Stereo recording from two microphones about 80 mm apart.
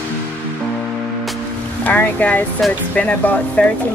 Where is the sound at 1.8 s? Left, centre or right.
Centre.